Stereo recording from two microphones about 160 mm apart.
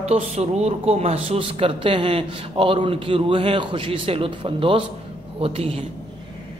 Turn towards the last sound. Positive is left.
turn(degrees=-35)  # may be behind; listen again after turning